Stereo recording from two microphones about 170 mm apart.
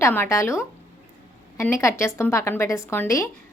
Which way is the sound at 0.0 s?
15° left (ahead or behind).